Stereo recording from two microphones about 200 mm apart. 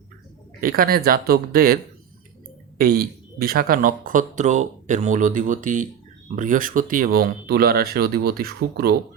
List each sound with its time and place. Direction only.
0.6 s speech: 50° right (ahead or behind)